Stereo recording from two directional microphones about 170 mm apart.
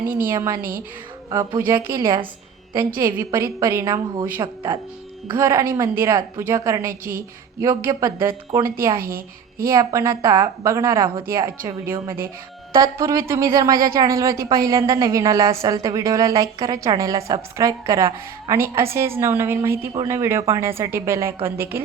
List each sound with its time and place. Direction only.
0.0 s a woman's voice: 60° right (ahead or behind)
0.3 s speech: 15° right (ahead or behind)
0.6 s a woman's voice: 60° right (ahead or behind)
1.5 s a woman's voice: 25° right (ahead or behind)
3.0 s a woman's voice: 15° right (ahead or behind)
7.9 s speech: 15° right (ahead or behind)
9.0 s a woman's voice: 60° right (ahead or behind)
9.7 s a woman's voice: 15° right (ahead or behind)